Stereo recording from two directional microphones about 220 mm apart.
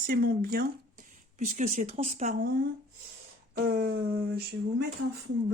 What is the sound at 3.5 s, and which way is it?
Speech, 45° right (ahead or behind).